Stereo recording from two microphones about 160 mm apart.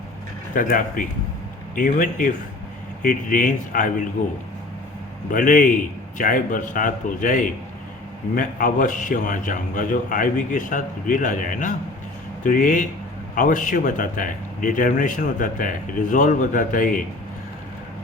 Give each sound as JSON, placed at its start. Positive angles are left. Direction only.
{"t": 0.5, "sound": "a man's voice", "side_deg": 55}
{"t": 5.3, "sound": "a man's voice", "side_deg": 55}